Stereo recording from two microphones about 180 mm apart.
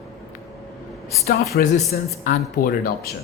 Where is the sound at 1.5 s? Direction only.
60° left (ahead or behind).